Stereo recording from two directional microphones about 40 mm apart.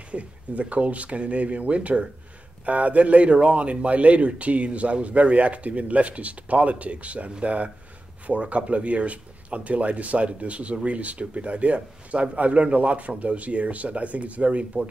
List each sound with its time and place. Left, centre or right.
0.1 s speech: right